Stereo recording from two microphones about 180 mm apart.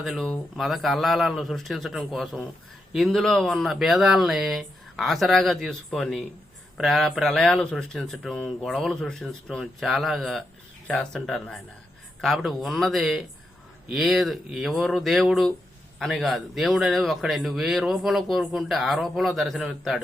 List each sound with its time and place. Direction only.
0.0 s a man's voice: centre (ahead or behind)